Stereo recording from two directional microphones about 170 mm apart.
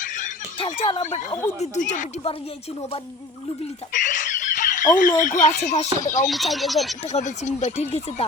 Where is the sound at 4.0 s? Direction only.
50° left (ahead or behind).